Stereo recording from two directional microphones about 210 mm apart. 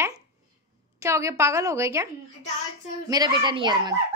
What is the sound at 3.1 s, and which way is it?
Speech, 20° right (ahead or behind).